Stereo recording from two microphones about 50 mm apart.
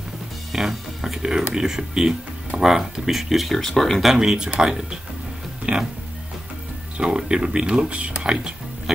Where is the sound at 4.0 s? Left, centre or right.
Centre.